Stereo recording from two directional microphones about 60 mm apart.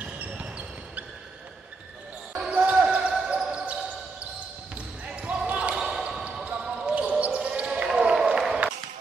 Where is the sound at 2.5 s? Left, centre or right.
Right.